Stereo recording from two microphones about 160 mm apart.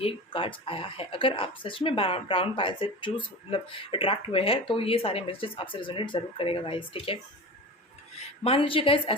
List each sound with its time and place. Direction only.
0.0 s speech: 35° left (ahead or behind)
8.4 s speech: 35° left (ahead or behind)